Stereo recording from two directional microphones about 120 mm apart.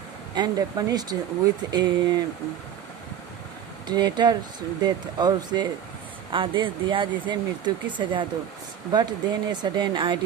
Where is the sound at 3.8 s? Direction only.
35° right (ahead or behind).